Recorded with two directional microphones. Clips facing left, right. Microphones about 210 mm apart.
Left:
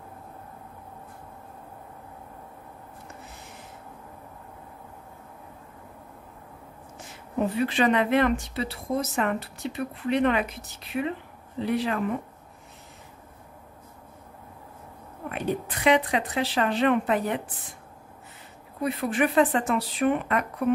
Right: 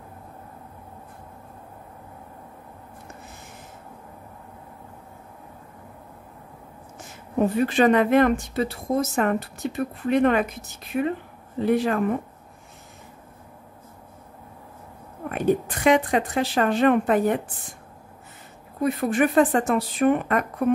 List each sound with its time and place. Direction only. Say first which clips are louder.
7.3 s speech: right 4 dB; 45° right (ahead or behind)
15.2 s speech: right 7 dB; 45° right (ahead or behind)
18.8 s speech: right 4 dB; 45° right (ahead or behind)